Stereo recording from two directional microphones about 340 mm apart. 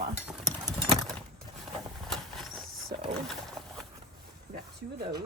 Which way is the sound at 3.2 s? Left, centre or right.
Centre.